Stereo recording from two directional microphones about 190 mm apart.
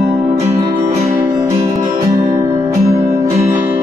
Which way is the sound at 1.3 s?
20° right (ahead or behind).